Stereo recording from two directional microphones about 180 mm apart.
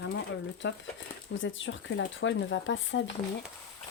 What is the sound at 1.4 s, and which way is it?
Speech, 90° left.